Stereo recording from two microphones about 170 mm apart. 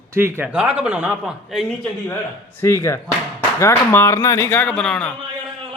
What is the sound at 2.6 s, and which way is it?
Speech, 15° left (ahead or behind).